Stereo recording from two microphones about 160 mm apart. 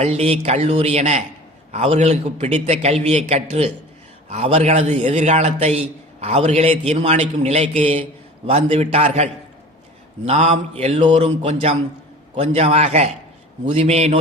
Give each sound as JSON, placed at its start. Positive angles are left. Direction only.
{"t": 0.0, "sound": "a man's voice", "side_deg": -40}